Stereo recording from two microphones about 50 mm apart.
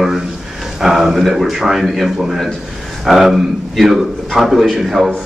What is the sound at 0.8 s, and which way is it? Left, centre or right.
A man's voice, centre.